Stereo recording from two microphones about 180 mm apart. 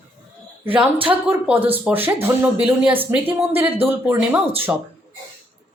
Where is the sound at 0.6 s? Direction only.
10° right (ahead or behind).